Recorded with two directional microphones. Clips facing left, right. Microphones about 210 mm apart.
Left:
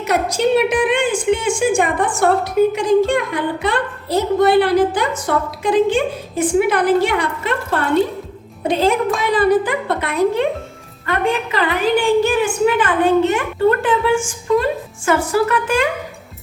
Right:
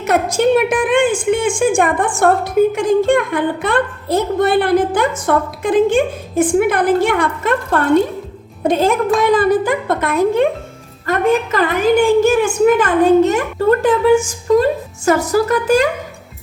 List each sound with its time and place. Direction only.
0.0 s a woman's voice: 50° right (ahead or behind)